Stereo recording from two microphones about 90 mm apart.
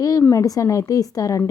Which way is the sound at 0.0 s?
40° left (ahead or behind).